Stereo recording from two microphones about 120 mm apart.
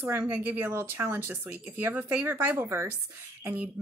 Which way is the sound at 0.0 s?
20° right (ahead or behind).